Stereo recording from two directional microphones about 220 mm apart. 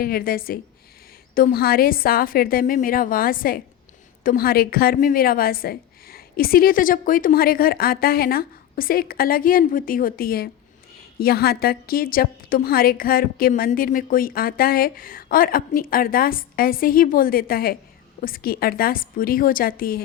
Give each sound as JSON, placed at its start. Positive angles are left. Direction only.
{"t": 0.0, "sound": "a woman's voice", "side_deg": 40}